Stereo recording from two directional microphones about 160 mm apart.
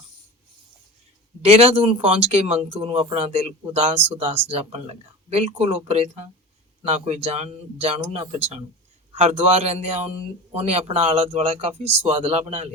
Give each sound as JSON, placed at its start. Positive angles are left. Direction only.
{"t": 1.4, "sound": "speech", "side_deg": -40}